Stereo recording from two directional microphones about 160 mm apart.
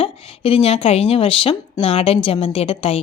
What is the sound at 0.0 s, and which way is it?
A woman's voice, 35° left (ahead or behind).